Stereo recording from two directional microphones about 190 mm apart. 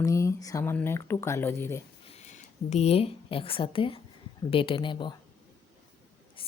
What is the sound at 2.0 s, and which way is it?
A woman's voice, 35° left (ahead or behind).